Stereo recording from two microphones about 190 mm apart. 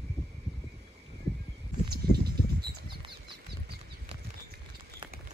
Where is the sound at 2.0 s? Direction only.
55° right (ahead or behind).